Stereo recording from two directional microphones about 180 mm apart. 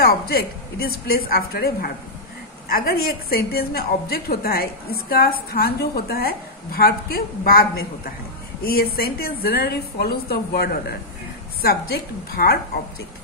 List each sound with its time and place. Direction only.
0.0 s a woman's voice: 55° left (ahead or behind)